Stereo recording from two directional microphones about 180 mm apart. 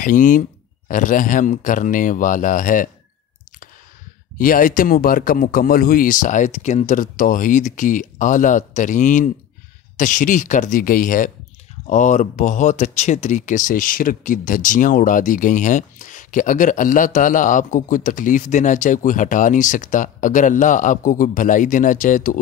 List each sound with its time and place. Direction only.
0.0 s speech: 45° left (ahead or behind)
4.4 s speech: 50° left (ahead or behind)